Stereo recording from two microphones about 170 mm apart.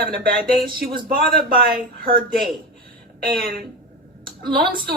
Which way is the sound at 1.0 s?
60° right (ahead or behind).